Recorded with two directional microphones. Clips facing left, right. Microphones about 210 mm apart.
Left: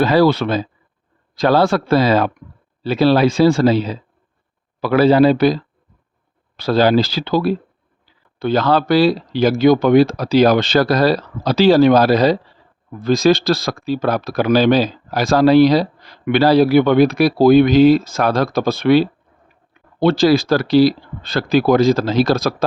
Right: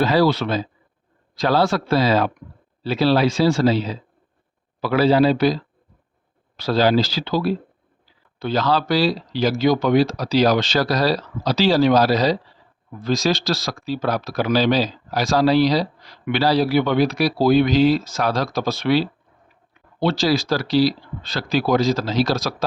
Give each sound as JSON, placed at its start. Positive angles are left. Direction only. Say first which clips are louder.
{"t": 0.0, "sound": "speech", "louder": "left 4 dB", "side_deg": 55}
{"t": 6.6, "sound": "speech", "louder": "left 4 dB", "side_deg": 55}